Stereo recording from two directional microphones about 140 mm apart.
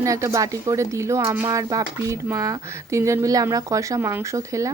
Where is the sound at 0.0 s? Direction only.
20° right (ahead or behind).